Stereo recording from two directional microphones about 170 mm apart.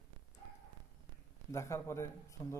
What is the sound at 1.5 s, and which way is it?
Speech, 15° left (ahead or behind).